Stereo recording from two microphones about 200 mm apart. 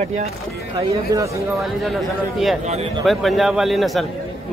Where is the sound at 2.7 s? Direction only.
30° right (ahead or behind).